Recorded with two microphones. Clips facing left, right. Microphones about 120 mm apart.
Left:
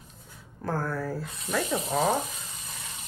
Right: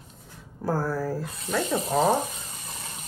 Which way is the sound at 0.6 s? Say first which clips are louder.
Right 3 dB; 5° right (ahead or behind).